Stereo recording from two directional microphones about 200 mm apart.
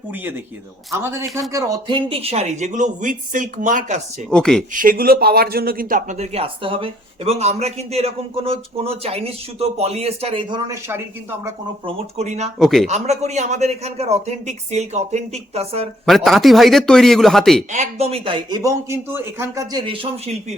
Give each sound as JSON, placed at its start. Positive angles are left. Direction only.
{"t": 0.9, "sound": "speech", "side_deg": -15}
{"t": 4.3, "sound": "a man's voice", "side_deg": 5}
{"t": 4.7, "sound": "speech", "side_deg": -45}
{"t": 10.7, "sound": "speech", "side_deg": -10}
{"t": 11.9, "sound": "speech", "side_deg": -35}
{"t": 12.5, "sound": "a man's voice", "side_deg": 0}
{"t": 12.9, "sound": "speech", "side_deg": -35}
{"t": 16.0, "sound": "a man's voice", "side_deg": 0}
{"t": 17.7, "sound": "speech", "side_deg": -35}